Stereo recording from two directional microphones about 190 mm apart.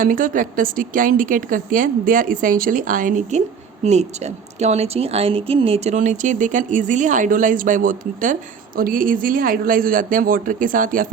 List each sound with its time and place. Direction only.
0.0 s speech: 45° right (ahead or behind)